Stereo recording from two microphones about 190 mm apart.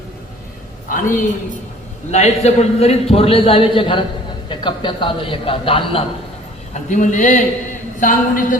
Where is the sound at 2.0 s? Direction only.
35° left (ahead or behind).